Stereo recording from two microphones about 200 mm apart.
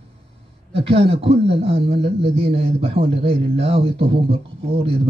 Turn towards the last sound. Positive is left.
turn(degrees=-30)  # may be behind; listen again after turning